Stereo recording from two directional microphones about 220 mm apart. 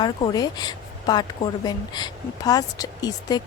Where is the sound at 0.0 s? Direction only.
20° left (ahead or behind).